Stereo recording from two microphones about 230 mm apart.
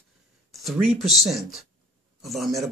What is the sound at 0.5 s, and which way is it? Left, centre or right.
A man's voice, centre.